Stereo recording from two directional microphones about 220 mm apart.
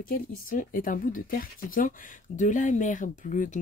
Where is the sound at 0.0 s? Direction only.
40° left (ahead or behind).